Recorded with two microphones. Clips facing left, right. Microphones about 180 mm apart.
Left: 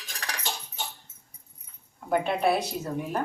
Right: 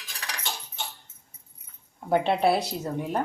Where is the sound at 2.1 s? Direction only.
30° right (ahead or behind).